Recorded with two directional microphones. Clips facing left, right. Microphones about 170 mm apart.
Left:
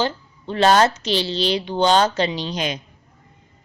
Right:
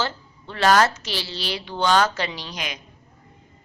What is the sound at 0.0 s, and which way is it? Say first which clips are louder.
A woman's voice: left 5 dB; 20° left (ahead or behind).